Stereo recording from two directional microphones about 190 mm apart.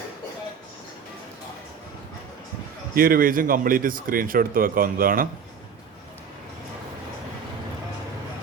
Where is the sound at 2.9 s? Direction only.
50° right (ahead or behind).